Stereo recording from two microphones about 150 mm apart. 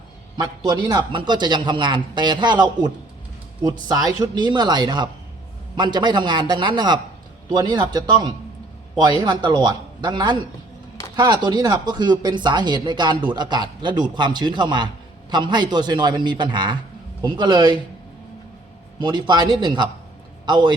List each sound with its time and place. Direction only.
0.3 s a man's voice: 30° right (ahead or behind)
18.9 s a man's voice: 30° right (ahead or behind)